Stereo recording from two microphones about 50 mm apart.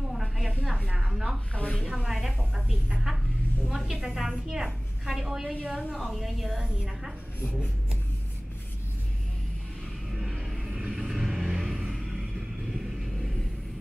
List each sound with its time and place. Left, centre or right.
0.1 s a sound: centre
0.9 s a woman's voice: centre
1.5 s speech: left
1.9 s a woman's voice: centre
5.9 s a woman's voice: centre
10.1 s vehicle: centre
10.8 s vehicle: centre